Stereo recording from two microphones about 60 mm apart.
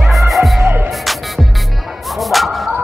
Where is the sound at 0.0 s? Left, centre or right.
Centre.